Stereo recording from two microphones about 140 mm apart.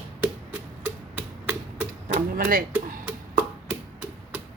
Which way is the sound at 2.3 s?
90° right.